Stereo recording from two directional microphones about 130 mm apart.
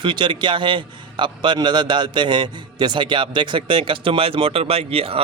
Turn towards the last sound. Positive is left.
turn(degrees=-45)  # may be behind; listen again after turning